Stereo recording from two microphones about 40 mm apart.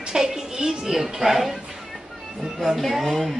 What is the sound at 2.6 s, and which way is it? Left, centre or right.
Music, centre.